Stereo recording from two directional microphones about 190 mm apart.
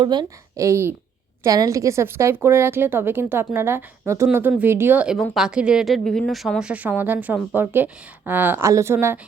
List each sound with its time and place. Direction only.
0.0 s a woman's voice: 25° right (ahead or behind)